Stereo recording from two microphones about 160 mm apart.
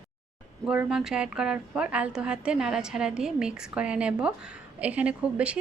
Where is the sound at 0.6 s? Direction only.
5° right (ahead or behind).